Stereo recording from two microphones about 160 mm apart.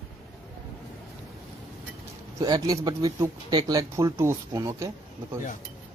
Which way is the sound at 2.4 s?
25° right (ahead or behind).